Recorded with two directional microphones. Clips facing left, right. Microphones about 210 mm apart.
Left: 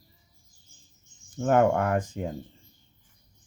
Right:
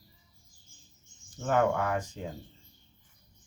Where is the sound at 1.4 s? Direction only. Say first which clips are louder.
Left 5 dB; 50° left (ahead or behind).